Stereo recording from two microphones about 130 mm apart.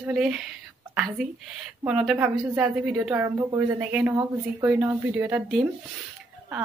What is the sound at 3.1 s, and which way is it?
Speech, 20° right (ahead or behind).